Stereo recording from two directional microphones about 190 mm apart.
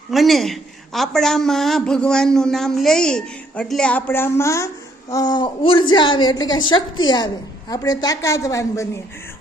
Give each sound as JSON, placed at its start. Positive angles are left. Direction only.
{"t": 0.1, "sound": "a woman's voice", "side_deg": 0}